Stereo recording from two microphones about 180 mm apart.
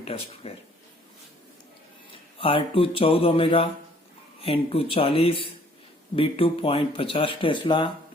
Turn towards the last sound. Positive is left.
turn(degrees=25)  # may be behind; listen again after turning